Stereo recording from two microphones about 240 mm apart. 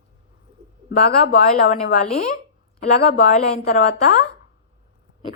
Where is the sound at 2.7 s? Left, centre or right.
Left.